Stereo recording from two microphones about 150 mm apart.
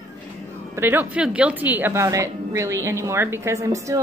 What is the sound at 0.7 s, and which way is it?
A woman's voice, 15° right (ahead or behind).